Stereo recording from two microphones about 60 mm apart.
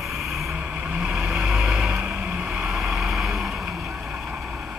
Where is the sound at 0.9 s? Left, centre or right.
Centre.